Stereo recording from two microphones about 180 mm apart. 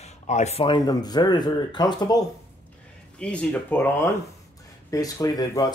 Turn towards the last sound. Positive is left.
turn(degrees=20)  # may be behind; listen again after turning